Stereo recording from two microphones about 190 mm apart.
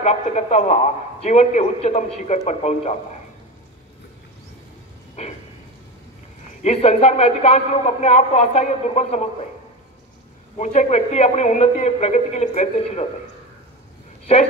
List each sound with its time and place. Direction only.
0.0 s speech: 35° left (ahead or behind)
6.6 s speech: 35° left (ahead or behind)
10.6 s speech: 40° left (ahead or behind)